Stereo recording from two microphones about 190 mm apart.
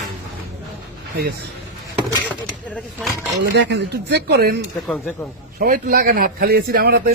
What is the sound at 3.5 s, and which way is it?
Speech, 65° right (ahead or behind).